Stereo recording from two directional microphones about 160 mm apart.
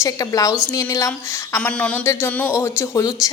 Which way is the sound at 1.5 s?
10° left (ahead or behind).